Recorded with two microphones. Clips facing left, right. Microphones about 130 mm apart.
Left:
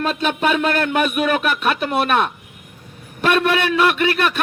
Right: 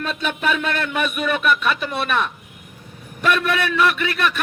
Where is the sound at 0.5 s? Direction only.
55° left (ahead or behind).